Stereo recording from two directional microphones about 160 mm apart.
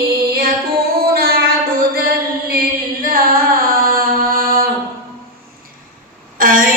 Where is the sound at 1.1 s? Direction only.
70° right (ahead or behind).